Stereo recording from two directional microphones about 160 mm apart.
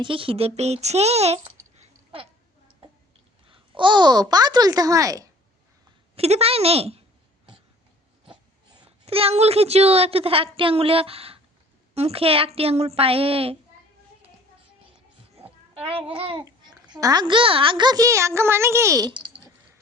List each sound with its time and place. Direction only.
0.0 s speech: 35° right (ahead or behind)
3.5 s a child's voice: 30° right (ahead or behind)
6.1 s a woman's voice: 40° right (ahead or behind)
8.3 s a woman's voice: 35° right (ahead or behind)
15.4 s a sound: 35° right (ahead or behind)
15.7 s a woman's voice: 35° right (ahead or behind)